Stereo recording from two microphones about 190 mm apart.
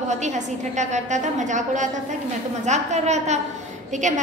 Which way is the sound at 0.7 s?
40° right (ahead or behind).